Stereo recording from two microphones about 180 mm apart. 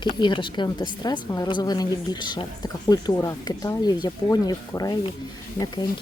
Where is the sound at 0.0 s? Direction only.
25° left (ahead or behind).